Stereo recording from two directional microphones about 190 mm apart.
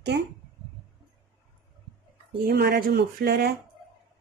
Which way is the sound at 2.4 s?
60° right (ahead or behind).